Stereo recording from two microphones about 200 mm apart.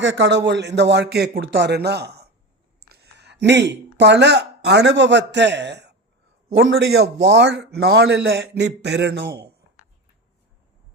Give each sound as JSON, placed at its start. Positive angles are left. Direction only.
{"t": 0.0, "sound": "a man's voice", "side_deg": -65}